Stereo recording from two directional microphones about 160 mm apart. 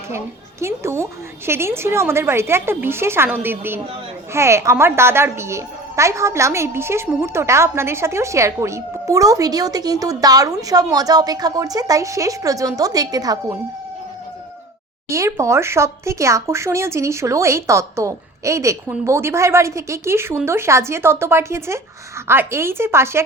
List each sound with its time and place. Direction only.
0.6 s a woman's voice: 15° right (ahead or behind)
15.1 s speech: 20° right (ahead or behind)